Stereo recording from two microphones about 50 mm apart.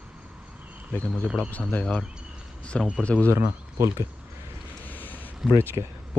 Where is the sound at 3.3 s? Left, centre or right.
Right.